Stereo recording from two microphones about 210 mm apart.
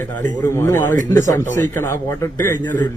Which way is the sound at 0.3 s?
15° left (ahead or behind).